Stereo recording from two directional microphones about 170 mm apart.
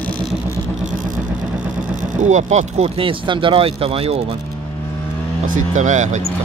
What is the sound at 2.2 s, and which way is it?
Speech, 45° right (ahead or behind).